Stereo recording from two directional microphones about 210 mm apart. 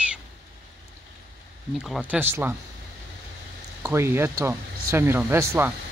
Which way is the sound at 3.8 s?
15° right (ahead or behind).